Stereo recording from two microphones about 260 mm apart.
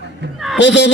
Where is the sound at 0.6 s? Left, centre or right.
Left.